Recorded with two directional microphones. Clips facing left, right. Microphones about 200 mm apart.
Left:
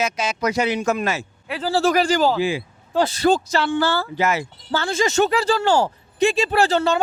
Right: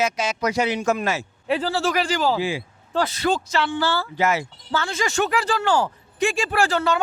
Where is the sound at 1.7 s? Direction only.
40° left (ahead or behind).